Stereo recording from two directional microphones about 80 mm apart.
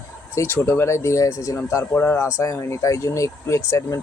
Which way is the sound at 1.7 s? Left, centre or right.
Left.